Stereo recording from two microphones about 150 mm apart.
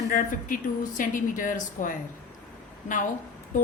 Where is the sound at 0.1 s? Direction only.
65° left (ahead or behind).